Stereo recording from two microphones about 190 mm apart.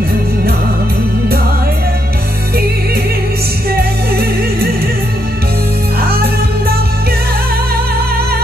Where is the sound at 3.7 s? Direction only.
55° right (ahead or behind).